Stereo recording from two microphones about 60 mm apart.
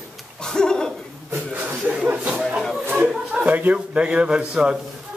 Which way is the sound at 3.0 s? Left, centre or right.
Centre.